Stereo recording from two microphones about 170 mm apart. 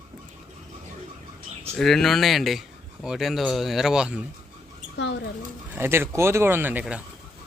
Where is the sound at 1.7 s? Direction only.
Centre (ahead or behind).